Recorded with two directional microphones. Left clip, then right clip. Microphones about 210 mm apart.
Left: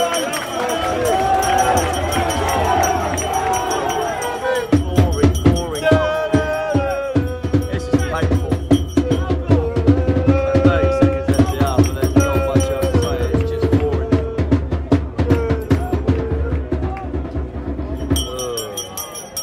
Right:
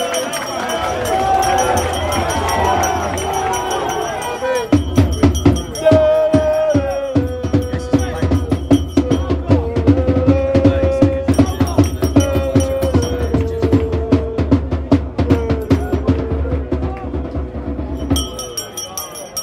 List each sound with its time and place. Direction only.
1.3 s music: centre (ahead or behind)
5.9 s music: 45° right (ahead or behind)
6.3 s music: centre (ahead or behind)